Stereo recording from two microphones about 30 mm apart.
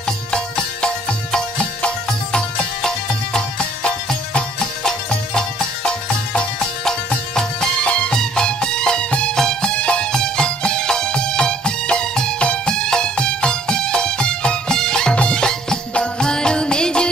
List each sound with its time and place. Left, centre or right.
0.3 s music: left
3.3 s music: left
5.9 s music: left
8.1 s music: left
9.3 s music: centre
9.6 s music: left
10.1 s music: left